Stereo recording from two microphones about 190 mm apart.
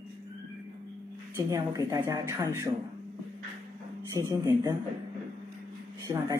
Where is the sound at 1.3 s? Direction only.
15° right (ahead or behind).